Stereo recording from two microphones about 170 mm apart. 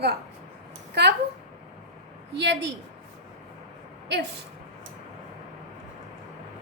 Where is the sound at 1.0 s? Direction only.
75° right (ahead or behind).